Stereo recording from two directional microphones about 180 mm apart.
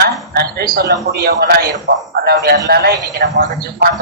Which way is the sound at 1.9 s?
55° right (ahead or behind).